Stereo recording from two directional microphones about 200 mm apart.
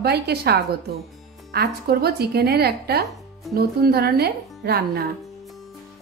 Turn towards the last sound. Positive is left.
turn(degrees=-50)  # may be behind; listen again after turning